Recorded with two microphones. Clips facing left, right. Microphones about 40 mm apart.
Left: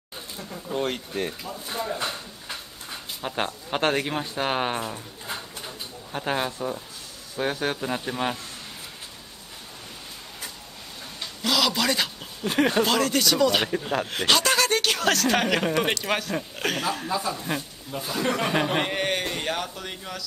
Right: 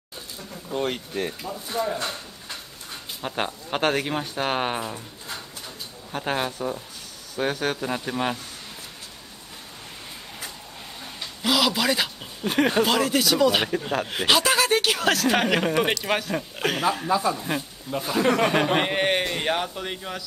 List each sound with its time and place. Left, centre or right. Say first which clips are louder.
0.4 s speech: left 2 dB; centre
0.7 s speech: right 1 dB; centre
2.4 s a sound: left 1 dB; centre
3.2 s speech: right 1 dB; centre
6.1 s speech: right 1 dB; centre
11.1 s speech: right 2 dB; centre